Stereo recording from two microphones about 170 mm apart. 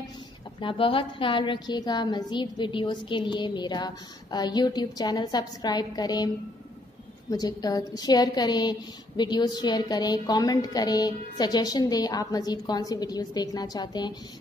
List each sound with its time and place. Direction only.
0.6 s a woman's voice: 30° left (ahead or behind)